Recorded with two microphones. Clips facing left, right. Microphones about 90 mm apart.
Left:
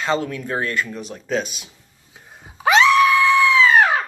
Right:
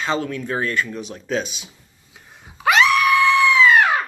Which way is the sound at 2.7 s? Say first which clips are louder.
Left 3 dB; 30° left (ahead or behind).